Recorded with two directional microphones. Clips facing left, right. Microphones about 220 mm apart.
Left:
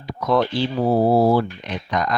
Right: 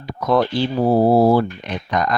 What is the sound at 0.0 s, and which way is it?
Speech, 50° right (ahead or behind).